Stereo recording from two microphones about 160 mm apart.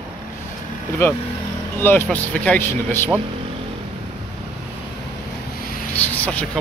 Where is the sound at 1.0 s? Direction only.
15° left (ahead or behind).